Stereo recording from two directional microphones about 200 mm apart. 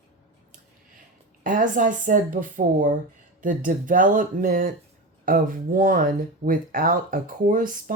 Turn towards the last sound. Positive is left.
turn(degrees=-45)  # may be behind; listen again after turning